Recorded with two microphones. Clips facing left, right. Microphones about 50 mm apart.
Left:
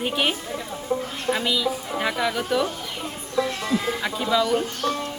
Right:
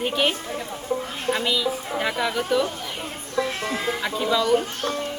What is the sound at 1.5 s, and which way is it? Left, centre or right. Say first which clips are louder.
A woman's voice: even; centre.